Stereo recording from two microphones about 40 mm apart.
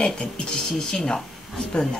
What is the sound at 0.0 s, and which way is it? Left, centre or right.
Speech, left.